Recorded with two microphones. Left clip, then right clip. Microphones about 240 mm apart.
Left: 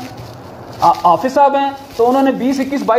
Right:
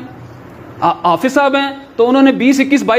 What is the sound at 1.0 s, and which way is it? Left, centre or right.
Speech, right.